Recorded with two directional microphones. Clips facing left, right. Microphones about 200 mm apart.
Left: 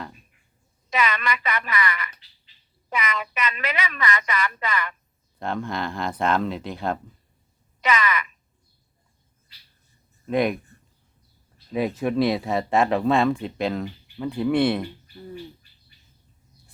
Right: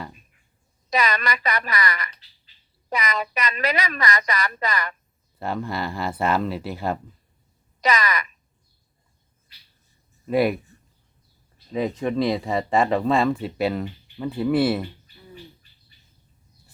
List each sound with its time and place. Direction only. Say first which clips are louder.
0.9 s speech: right 1 dB; 40° right (ahead or behind)
5.4 s speech: even; 5° right (ahead or behind)
7.8 s speech: even; 40° right (ahead or behind)
10.2 s speech: right 2 dB; 5° right (ahead or behind)
11.7 s speech: even; 5° left (ahead or behind)